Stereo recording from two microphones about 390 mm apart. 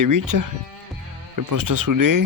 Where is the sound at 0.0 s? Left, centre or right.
Right.